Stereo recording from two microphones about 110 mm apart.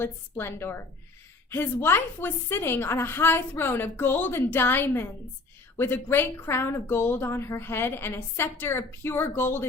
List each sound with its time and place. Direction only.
0.0 s a woman's voice: 20° left (ahead or behind)